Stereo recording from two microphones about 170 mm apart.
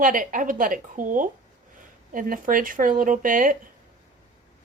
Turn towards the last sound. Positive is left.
turn(degrees=-50)  # may be behind; listen again after turning